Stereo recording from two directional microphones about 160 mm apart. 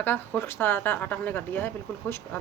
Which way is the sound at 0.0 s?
10° left (ahead or behind).